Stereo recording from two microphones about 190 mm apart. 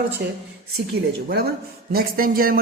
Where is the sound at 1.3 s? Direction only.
55° right (ahead or behind).